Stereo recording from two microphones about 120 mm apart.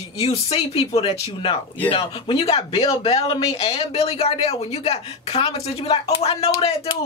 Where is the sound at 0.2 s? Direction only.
55° left (ahead or behind).